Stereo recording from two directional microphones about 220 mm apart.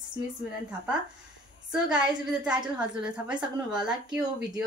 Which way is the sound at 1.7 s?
5° right (ahead or behind).